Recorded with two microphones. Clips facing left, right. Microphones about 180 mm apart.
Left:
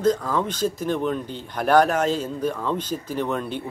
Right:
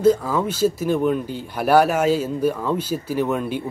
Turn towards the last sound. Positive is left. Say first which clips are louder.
# right 4 dB
turn(degrees=-10)  # may be behind; listen again after turning